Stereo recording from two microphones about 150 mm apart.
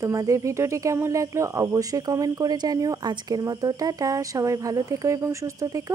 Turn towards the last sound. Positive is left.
turn(degrees=-20)  # may be behind; listen again after turning